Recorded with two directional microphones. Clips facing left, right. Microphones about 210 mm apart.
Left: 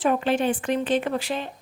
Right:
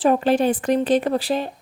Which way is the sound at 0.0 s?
35° right (ahead or behind).